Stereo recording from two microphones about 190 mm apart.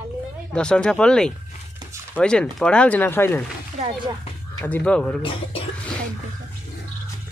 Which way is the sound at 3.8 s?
35° right (ahead or behind).